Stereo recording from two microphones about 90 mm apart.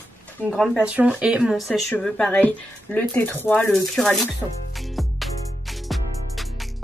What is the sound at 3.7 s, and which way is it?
Speech, 5° left (ahead or behind).